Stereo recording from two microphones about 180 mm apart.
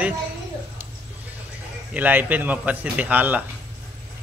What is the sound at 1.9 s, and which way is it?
A man's voice, 10° right (ahead or behind).